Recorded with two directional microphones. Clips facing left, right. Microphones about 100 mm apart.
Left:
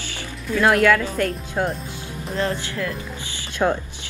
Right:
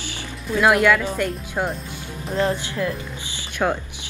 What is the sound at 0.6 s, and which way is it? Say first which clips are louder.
Speech: even; 10° right (ahead or behind).